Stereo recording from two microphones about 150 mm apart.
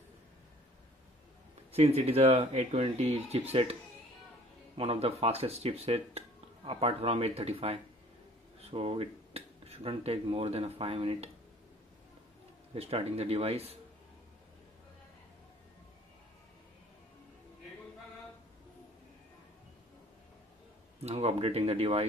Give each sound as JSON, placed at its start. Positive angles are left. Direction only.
{"t": 1.7, "sound": "speech", "side_deg": -45}
{"t": 4.7, "sound": "speech", "side_deg": -40}
{"t": 12.7, "sound": "speech", "side_deg": -40}
{"t": 21.0, "sound": "speech", "side_deg": -40}